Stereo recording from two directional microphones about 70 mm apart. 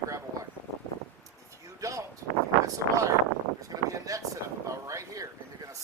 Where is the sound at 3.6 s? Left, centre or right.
Right.